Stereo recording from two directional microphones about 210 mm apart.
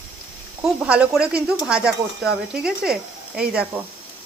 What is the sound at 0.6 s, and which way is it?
Speech, 5° right (ahead or behind).